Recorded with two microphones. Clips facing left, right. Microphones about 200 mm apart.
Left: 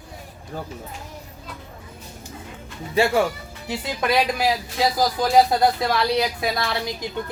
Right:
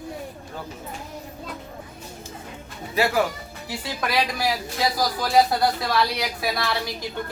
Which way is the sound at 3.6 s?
20° left (ahead or behind).